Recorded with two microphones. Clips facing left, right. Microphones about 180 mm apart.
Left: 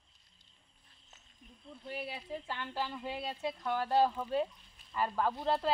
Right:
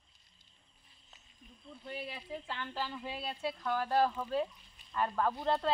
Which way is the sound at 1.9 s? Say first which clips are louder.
Left 1 dB; 10° left (ahead or behind).